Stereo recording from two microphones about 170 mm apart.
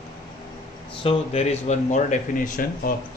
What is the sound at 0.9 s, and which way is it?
Speech, 35° left (ahead or behind).